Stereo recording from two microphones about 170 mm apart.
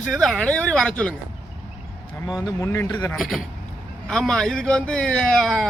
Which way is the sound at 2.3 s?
20° left (ahead or behind).